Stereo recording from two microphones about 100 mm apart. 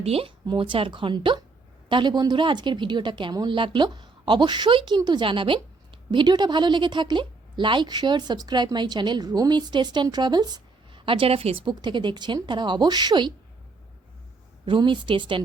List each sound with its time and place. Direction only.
0.0 s a woman's voice: 75° right (ahead or behind); by 5.2 s 45° right (ahead or behind)
5.2 s a woman's voice: 60° right (ahead or behind)
6.1 s a woman's voice: 50° right (ahead or behind); by 11.7 s 65° right (ahead or behind)
11.7 s a woman's voice: 50° right (ahead or behind)
14.6 s a woman's voice: 55° right (ahead or behind)